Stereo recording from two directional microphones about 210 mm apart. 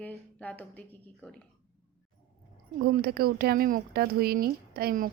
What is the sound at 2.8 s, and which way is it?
Speech, 45° right (ahead or behind).